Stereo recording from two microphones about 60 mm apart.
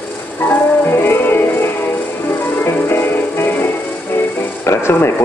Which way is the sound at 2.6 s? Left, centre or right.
Left.